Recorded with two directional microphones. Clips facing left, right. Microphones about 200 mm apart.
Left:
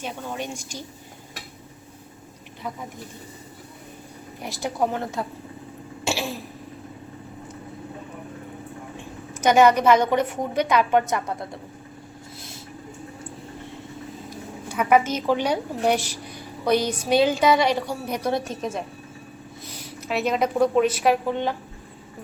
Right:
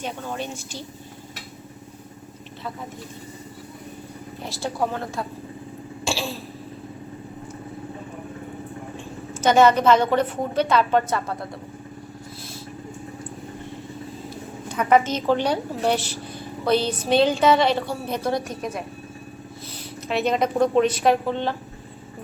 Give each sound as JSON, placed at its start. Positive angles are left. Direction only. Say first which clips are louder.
{"t": 0.0, "sound": "a woman's voice", "louder": "right 1 dB", "side_deg": 10}
{"t": 4.4, "sound": "a woman's voice", "louder": "left 1 dB", "side_deg": 15}
{"t": 6.1, "sound": "throat clearing", "louder": "even", "side_deg": 20}
{"t": 9.4, "sound": "a woman's voice", "louder": "even", "side_deg": 15}
{"t": 14.7, "sound": "a woman's voice", "louder": "right 1 dB", "side_deg": 10}
{"t": 20.0, "sound": "a woman's voice", "louder": "right 1 dB", "side_deg": 5}